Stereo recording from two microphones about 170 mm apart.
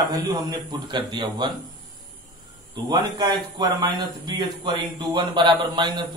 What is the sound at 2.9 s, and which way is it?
A man's voice, 25° right (ahead or behind).